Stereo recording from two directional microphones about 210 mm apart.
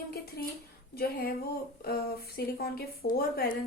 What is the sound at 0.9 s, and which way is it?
A woman's voice, 50° left (ahead or behind).